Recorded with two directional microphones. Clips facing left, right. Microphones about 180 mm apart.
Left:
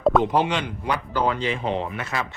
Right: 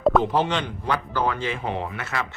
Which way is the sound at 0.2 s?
15° left (ahead or behind).